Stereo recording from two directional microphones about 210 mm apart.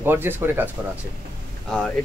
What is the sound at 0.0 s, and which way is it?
Speech, 10° right (ahead or behind).